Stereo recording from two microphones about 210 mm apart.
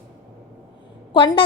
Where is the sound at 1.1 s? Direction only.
20° left (ahead or behind).